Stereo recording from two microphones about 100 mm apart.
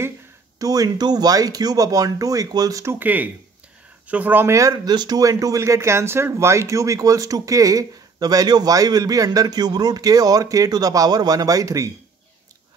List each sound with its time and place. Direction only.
0.6 s speech: 40° right (ahead or behind); by 4.5 s 15° right (ahead or behind)
4.5 s speech: 35° right (ahead or behind)